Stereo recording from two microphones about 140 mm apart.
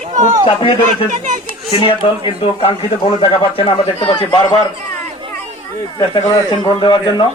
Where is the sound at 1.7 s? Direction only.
40° left (ahead or behind).